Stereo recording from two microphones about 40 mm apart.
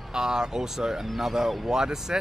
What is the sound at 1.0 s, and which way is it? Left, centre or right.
Speech, centre.